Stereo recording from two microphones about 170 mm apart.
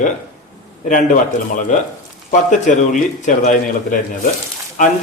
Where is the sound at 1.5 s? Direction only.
50° left (ahead or behind).